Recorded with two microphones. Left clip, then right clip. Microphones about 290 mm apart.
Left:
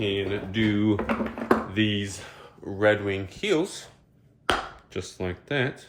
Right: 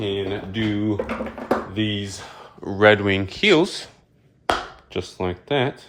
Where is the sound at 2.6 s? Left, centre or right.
Right.